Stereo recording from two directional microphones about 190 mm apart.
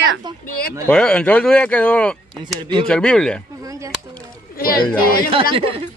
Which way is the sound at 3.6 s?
15° right (ahead or behind).